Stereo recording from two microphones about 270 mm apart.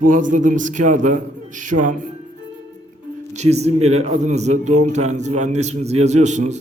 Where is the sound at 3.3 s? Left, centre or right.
Right.